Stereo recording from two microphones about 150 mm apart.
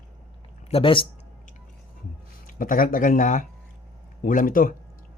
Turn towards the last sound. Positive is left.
turn(degrees=70)  # may be behind; listen again after turning